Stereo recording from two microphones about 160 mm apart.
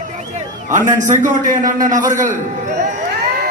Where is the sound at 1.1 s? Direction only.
50° right (ahead or behind).